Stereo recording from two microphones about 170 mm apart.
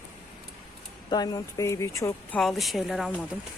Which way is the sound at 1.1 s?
25° left (ahead or behind).